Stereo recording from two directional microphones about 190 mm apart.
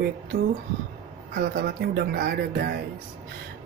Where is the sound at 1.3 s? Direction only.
55° right (ahead or behind).